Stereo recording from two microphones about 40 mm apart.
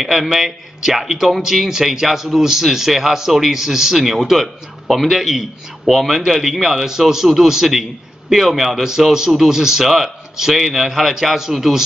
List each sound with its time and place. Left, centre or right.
0.0 s a man's voice: centre